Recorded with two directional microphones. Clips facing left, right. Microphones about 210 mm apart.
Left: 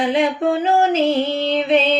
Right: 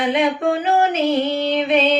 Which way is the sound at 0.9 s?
30° left (ahead or behind).